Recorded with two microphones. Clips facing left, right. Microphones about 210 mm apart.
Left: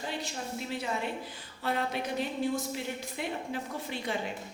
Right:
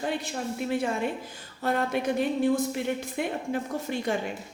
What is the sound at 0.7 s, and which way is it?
A woman's voice, 50° right (ahead or behind).